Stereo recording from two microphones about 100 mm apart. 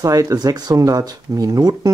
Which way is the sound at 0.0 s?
35° right (ahead or behind).